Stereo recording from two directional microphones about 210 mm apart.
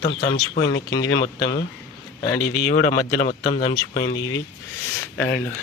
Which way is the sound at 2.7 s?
30° left (ahead or behind).